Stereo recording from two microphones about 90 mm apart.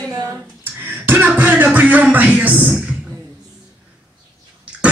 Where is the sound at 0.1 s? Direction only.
40° right (ahead or behind).